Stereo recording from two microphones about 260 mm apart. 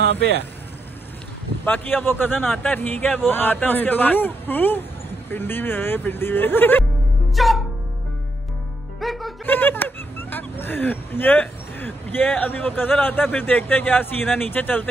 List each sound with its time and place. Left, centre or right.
0.0 s speech: right
1.6 s a man's voice: centre
9.0 s speech: centre